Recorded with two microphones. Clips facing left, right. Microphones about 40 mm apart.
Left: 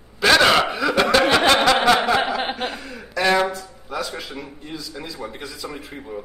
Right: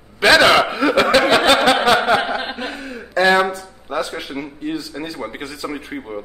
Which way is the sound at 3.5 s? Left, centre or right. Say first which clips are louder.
Right 4 dB; right.